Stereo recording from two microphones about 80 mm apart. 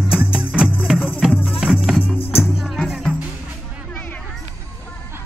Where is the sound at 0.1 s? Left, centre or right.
Centre.